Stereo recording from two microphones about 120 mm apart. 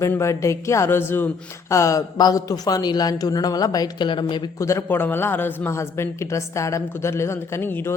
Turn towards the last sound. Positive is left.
turn(degrees=15)  # may be behind; listen again after turning